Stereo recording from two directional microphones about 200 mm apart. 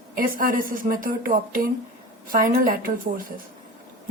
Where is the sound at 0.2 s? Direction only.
45° right (ahead or behind).